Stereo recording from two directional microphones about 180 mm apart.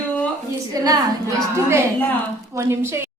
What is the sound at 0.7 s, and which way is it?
Speech, 20° right (ahead or behind).